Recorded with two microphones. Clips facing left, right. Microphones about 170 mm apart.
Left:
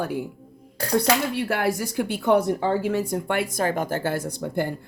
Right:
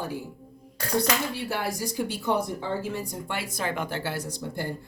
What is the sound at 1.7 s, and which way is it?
Speech, 65° left (ahead or behind).